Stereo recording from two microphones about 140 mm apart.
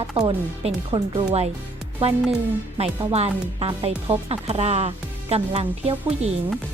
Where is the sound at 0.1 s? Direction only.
45° right (ahead or behind).